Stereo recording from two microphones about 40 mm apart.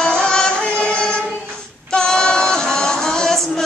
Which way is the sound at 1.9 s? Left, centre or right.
Centre.